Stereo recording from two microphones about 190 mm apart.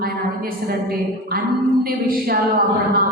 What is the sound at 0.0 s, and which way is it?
A woman's voice, 50° right (ahead or behind).